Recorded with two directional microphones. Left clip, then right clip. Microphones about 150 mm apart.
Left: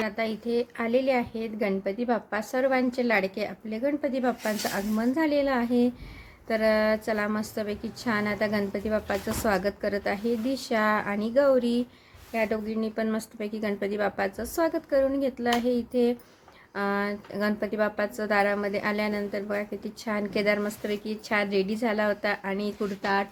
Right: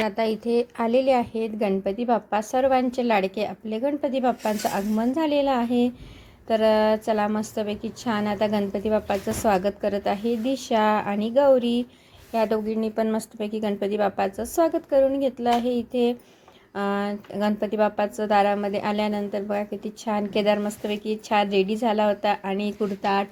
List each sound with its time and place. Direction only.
0.0 s speech: 30° right (ahead or behind); by 23.2 s 10° right (ahead or behind)